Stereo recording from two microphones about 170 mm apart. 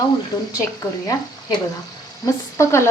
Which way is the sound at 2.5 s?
15° left (ahead or behind).